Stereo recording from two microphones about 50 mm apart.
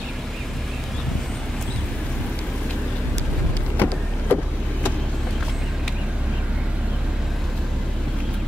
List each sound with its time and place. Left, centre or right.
3.7 s vehicle: left